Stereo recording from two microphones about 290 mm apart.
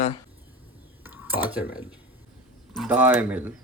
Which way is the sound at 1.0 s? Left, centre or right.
Centre.